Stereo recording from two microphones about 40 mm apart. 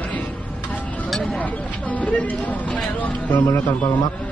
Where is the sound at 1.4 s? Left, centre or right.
Left.